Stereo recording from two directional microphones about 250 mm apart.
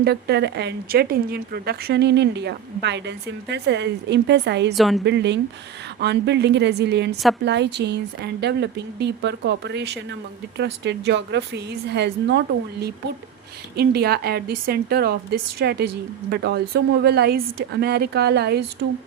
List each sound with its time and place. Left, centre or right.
0.0 s a woman's voice: right
4.7 s a woman's voice: centre
5.0 s a woman's voice: right
13.7 s a woman's voice: right